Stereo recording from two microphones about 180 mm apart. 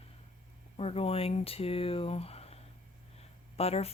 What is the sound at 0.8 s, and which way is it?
Speech, 35° left (ahead or behind).